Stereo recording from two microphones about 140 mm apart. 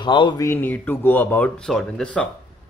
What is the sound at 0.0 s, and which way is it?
Speech, 35° left (ahead or behind).